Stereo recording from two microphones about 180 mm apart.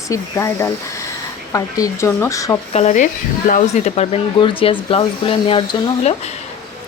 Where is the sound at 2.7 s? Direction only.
40° left (ahead or behind).